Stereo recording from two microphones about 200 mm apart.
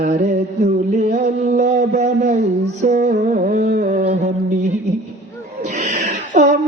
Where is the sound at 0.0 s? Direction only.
35° right (ahead or behind).